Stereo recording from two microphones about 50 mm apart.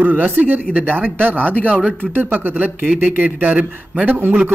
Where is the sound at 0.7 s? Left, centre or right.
Right.